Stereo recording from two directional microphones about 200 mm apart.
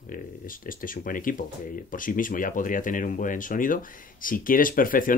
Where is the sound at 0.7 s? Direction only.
45° left (ahead or behind).